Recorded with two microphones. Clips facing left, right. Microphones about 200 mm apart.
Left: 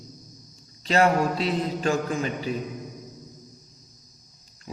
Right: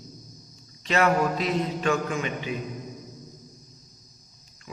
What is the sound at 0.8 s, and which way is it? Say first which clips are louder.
A man's voice: left 2 dB; 30° left (ahead or behind).